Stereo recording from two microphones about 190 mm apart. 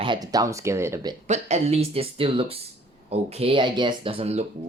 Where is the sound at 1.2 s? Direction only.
35° right (ahead or behind).